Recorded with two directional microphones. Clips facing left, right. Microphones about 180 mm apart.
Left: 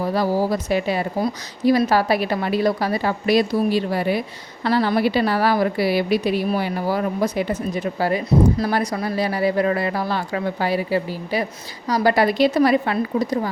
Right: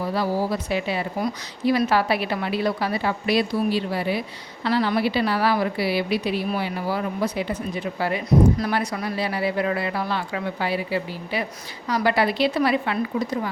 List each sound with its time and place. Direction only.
0.0 s a woman's voice: 45° left (ahead or behind)